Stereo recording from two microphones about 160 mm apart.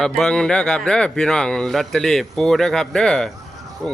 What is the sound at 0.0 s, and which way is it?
Speech, 5° left (ahead or behind).